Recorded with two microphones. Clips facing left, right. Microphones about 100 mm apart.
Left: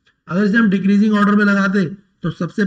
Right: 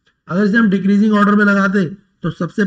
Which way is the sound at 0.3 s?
35° right (ahead or behind).